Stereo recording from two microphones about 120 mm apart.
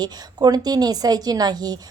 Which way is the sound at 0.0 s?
35° right (ahead or behind).